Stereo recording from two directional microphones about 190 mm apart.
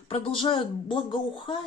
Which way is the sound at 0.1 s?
25° left (ahead or behind).